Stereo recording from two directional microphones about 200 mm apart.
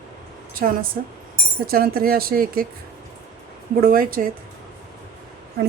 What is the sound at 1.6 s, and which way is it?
Speech, 50° right (ahead or behind).